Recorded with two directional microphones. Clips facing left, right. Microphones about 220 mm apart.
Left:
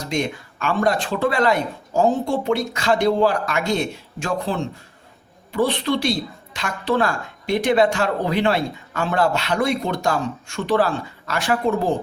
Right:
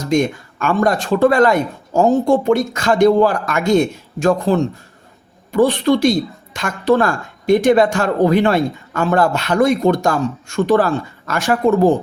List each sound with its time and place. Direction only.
0.0 s a woman's voice: 45° right (ahead or behind)